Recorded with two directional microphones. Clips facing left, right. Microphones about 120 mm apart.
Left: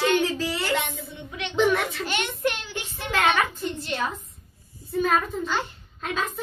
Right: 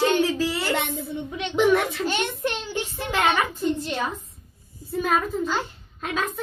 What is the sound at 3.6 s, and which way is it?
A child's voice, centre (ahead or behind).